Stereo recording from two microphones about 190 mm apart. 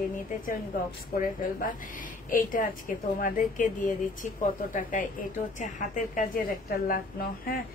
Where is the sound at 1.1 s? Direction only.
50° left (ahead or behind).